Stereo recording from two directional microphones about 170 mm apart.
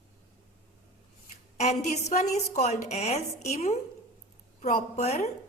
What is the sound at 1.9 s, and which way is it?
A woman's voice, 40° left (ahead or behind).